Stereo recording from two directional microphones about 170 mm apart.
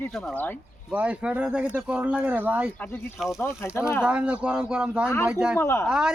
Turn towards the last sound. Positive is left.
turn(degrees=-5)  # may be behind; listen again after turning